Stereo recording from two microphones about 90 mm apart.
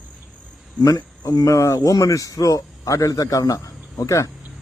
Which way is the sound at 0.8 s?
45° left (ahead or behind).